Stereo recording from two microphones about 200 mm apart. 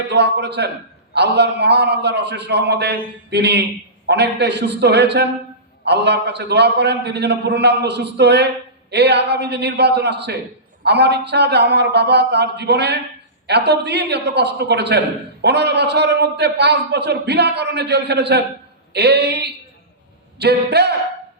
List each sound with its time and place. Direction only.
0.1 s a man's voice: 55° right (ahead or behind)